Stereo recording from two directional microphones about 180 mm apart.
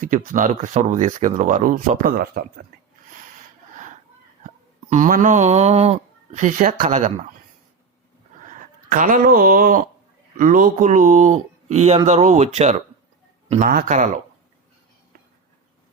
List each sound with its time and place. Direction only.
0.0 s speech: 45° right (ahead or behind)
4.4 s speech: 45° right (ahead or behind)
8.4 s speech: 45° right (ahead or behind)